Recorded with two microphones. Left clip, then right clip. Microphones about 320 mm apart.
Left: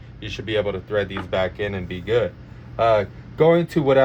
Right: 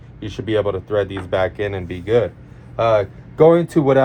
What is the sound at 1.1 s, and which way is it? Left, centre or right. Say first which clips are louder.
A man's voice: right 3 dB; centre.